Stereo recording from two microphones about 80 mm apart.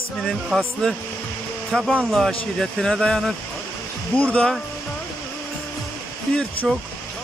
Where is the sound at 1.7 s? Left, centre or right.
Centre.